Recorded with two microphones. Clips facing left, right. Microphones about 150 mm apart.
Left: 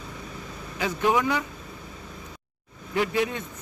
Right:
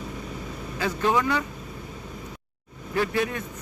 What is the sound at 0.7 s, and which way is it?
Speech, 15° left (ahead or behind).